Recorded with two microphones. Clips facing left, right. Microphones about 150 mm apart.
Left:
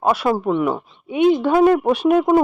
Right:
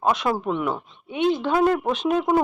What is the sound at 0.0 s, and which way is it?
A woman's voice, 10° left (ahead or behind).